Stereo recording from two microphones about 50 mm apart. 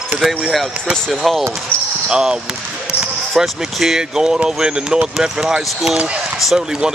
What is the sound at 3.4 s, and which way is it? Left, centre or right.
Speech, centre.